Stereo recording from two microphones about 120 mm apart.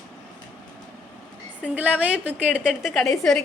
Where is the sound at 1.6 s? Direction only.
15° right (ahead or behind); by 3.4 s 5° left (ahead or behind).